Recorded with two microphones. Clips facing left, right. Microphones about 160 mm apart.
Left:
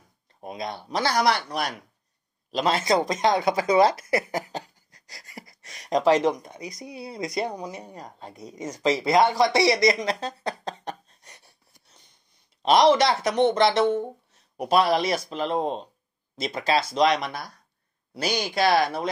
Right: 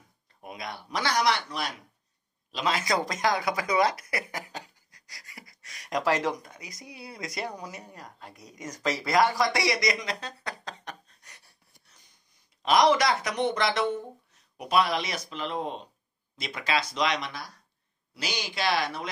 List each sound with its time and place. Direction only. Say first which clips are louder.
0.4 s speech: left 6 dB; 25° left (ahead or behind); by 1.7 s 45° left (ahead or behind)
2.5 s speech: left 5 dB; 35° left (ahead or behind)